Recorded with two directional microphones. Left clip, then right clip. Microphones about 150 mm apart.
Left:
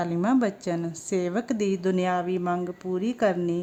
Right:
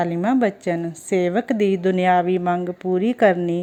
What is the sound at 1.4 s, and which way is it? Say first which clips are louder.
Speech: right 7 dB; 20° right (ahead or behind).